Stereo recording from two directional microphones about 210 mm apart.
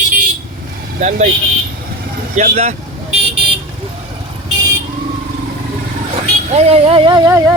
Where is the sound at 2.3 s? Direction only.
30° right (ahead or behind).